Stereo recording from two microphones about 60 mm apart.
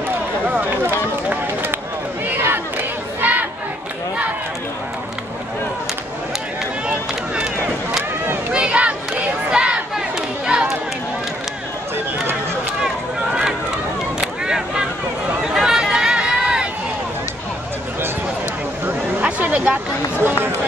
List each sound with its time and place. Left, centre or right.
0.5 s run: right
2.2 s battle cry: right
6.9 s run: right
8.5 s crowd: centre
9.5 s battle cry: centre
12.8 s a sound: centre
15.4 s run: centre
19.2 s a sound: right